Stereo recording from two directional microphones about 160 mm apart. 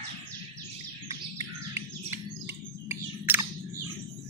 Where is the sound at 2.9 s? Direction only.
15° right (ahead or behind).